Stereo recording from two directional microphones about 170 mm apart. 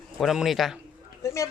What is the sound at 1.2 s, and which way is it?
Speech, 15° left (ahead or behind).